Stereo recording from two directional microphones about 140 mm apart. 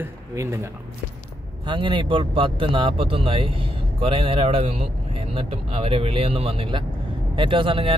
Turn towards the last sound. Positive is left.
turn(degrees=-40)  # may be behind; listen again after turning